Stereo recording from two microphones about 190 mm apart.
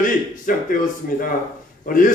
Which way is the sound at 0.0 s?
45° left (ahead or behind).